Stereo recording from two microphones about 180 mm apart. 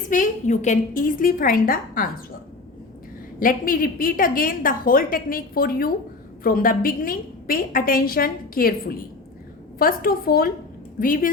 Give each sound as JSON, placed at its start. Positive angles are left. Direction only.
{"t": 0.1, "sound": "a woman's voice", "side_deg": 45}
{"t": 3.4, "sound": "a woman's voice", "side_deg": 50}